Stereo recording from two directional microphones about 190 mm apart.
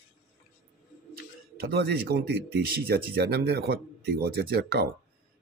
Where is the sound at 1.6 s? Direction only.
55° right (ahead or behind).